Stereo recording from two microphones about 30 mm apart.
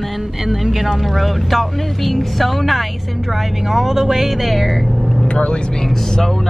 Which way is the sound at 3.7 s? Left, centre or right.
Centre.